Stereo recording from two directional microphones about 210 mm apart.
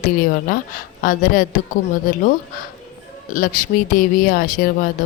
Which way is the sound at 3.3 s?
40° left (ahead or behind).